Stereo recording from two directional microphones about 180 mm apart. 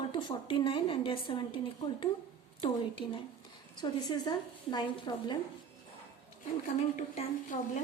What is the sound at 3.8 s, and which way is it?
A woman's voice, 25° left (ahead or behind).